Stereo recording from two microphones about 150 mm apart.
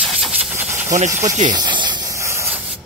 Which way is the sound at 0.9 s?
50° right (ahead or behind).